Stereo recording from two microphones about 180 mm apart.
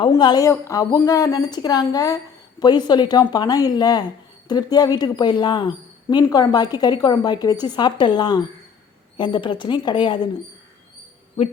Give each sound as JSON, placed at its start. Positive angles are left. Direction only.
{"t": 0.0, "sound": "speech", "side_deg": 25}